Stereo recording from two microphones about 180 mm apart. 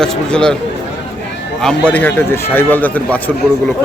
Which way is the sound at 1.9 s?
10° left (ahead or behind).